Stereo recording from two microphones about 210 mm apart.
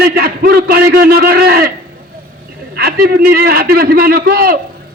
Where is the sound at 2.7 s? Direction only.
45° right (ahead or behind).